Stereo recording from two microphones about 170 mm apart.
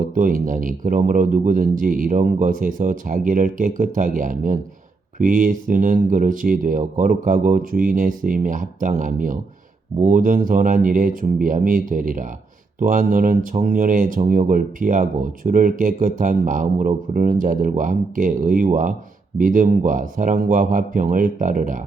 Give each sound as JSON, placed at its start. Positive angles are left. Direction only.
{"t": 0.0, "sound": "speech", "side_deg": -50}